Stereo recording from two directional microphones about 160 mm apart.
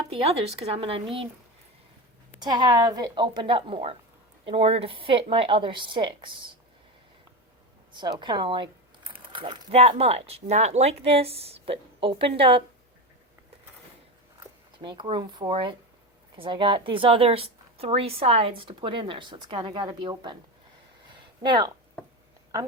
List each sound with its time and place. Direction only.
0.1 s a woman's voice: 35° right (ahead or behind)
2.4 s a woman's voice: 25° right (ahead or behind)
8.2 s a woman's voice: 30° right (ahead or behind)
14.8 s a woman's voice: 30° right (ahead or behind)
21.4 s a woman's voice: 30° right (ahead or behind)